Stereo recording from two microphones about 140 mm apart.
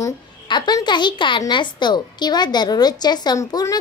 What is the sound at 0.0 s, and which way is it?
A woman's voice, 30° left (ahead or behind).